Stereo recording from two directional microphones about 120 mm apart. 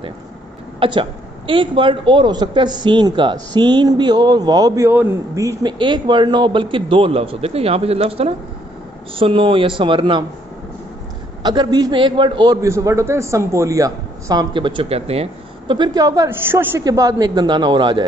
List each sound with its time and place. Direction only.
0.7 s a woman's voice: 40° right (ahead or behind)
4.8 s a man's voice: 15° right (ahead or behind)
5.3 s a man's voice: 25° right (ahead or behind)
5.7 s a man's voice: 40° right (ahead or behind)
11.4 s a woman's voice: 35° right (ahead or behind)
12.6 s a man's voice: 25° right (ahead or behind); by 15.2 s 55° right (ahead or behind)
15.7 s a man's voice: 35° right (ahead or behind); by 16.8 s 20° right (ahead or behind)
16.8 s a woman's voice: 30° right (ahead or behind)